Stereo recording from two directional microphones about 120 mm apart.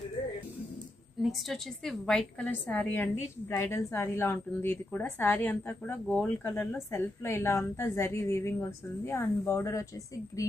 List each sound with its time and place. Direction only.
1.2 s a woman's voice: centre (ahead or behind); by 9.8 s 25° left (ahead or behind)